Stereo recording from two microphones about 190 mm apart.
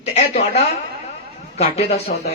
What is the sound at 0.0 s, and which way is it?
A woman's voice, 35° left (ahead or behind).